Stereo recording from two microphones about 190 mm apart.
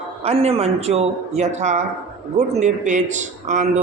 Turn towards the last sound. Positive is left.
turn(degrees=-40)  # may be behind; listen again after turning